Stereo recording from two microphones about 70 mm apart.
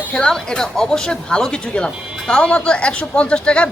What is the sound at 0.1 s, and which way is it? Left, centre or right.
Speech, centre.